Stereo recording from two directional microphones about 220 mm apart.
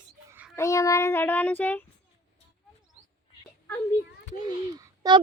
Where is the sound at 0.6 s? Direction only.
15° left (ahead or behind).